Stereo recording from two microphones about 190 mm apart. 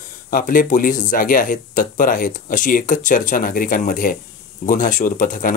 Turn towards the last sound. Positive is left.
turn(degrees=45)  # may be behind; listen again after turning